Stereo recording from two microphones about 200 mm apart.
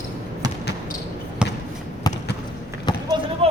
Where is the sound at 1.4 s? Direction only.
5° right (ahead or behind).